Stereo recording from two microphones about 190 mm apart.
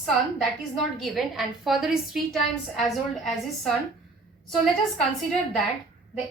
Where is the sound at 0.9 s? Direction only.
Centre (ahead or behind).